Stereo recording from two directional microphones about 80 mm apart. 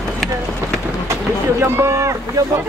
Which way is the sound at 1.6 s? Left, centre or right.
Right.